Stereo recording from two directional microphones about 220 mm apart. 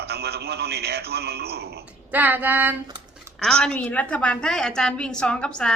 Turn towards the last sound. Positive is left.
turn(degrees=5)  # may be behind; listen again after turning